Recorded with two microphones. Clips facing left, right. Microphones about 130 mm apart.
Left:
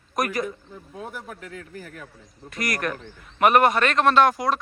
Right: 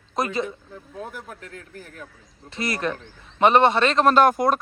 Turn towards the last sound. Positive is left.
turn(degrees=-50)  # may be behind; listen again after turning